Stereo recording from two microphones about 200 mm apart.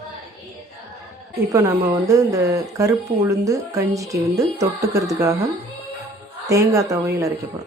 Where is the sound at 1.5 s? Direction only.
15° right (ahead or behind).